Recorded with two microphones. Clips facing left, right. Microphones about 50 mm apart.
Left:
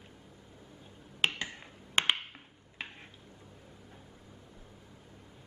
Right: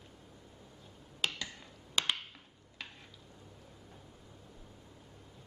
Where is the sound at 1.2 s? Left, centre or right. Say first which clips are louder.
Left 5 dB; left.